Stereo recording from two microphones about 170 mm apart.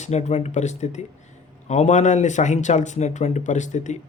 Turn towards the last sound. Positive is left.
turn(degrees=45)  # may be behind; listen again after turning